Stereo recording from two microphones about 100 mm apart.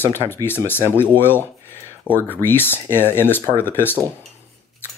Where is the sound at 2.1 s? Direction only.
20° left (ahead or behind).